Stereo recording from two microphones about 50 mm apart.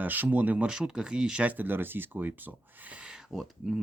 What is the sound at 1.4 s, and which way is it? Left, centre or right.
Speech, right.